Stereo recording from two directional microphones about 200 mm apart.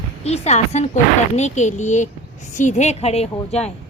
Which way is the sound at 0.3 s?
35° left (ahead or behind).